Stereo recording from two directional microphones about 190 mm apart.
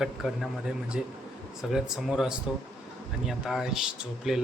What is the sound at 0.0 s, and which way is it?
Speech, centre (ahead or behind).